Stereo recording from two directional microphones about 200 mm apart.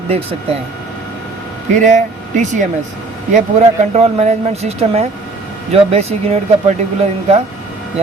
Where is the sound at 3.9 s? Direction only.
35° right (ahead or behind).